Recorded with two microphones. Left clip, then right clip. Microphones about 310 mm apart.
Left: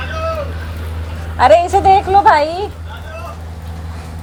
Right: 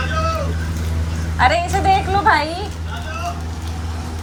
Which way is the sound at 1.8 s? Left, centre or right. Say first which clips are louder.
Left 6 dB; centre.